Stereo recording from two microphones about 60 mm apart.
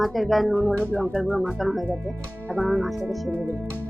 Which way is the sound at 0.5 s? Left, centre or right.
Left.